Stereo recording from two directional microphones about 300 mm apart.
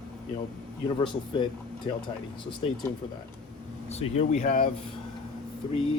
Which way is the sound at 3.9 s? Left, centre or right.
Left.